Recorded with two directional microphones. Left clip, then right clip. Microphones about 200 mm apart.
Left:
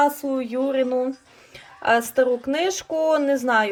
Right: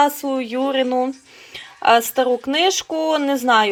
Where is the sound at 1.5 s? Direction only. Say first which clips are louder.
Right 5 dB; centre (ahead or behind).